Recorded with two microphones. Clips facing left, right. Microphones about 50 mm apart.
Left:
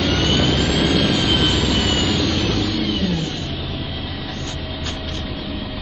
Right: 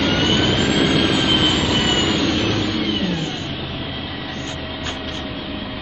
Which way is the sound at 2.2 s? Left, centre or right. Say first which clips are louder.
Right 1 dB; centre.